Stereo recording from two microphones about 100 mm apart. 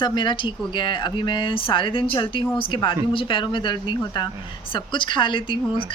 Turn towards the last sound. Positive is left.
turn(degrees=60)  # may be behind; listen again after turning